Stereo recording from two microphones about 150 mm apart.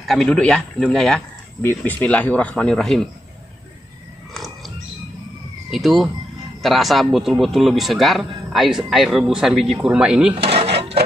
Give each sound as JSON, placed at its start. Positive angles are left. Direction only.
{"t": 0.0, "sound": "a man's voice", "side_deg": 0}
{"t": 4.3, "sound": "a sound", "side_deg": 0}
{"t": 5.7, "sound": "a man's voice", "side_deg": 0}
{"t": 10.3, "sound": "drawer open or close", "side_deg": -45}